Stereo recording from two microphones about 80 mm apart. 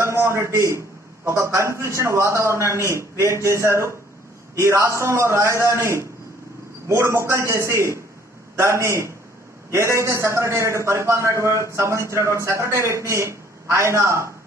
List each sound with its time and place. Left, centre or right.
0.0 s a man's voice: right